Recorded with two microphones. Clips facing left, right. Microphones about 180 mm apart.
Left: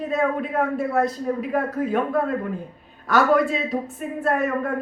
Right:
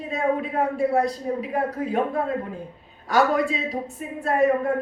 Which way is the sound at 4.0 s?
55° left (ahead or behind).